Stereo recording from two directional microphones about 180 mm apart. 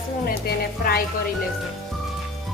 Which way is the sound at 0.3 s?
55° left (ahead or behind).